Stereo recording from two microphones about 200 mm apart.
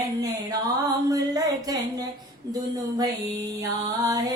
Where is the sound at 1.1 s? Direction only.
15° right (ahead or behind).